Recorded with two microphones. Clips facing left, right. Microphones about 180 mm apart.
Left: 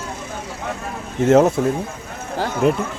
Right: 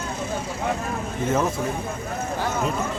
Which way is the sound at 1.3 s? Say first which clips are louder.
Left 10 dB; 75° left (ahead or behind).